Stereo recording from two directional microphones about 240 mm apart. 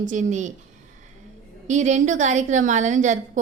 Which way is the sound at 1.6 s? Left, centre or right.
Right.